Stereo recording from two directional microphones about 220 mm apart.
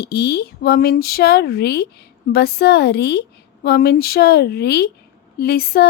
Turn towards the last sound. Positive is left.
turn(degrees=45)  # may be behind; listen again after turning